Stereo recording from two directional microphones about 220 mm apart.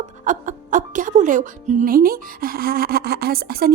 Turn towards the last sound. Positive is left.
turn(degrees=-45)  # may be behind; listen again after turning